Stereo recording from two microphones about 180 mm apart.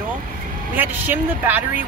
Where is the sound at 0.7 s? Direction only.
10° right (ahead or behind).